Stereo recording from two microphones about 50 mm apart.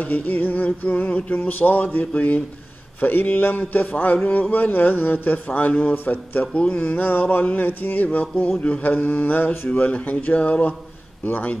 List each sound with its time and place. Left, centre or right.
0.0 s a man's voice: left
7.0 s a man's voice: left
11.2 s a man's voice: left